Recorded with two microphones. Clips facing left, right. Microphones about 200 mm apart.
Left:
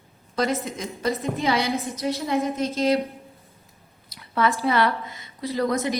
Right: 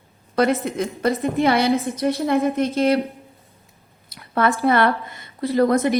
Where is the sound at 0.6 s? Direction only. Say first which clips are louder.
Right 5 dB; 60° right (ahead or behind).